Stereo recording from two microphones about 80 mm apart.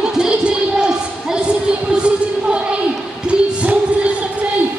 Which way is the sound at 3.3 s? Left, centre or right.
Centre.